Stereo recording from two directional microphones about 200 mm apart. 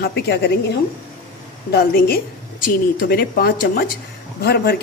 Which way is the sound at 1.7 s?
50° left (ahead or behind).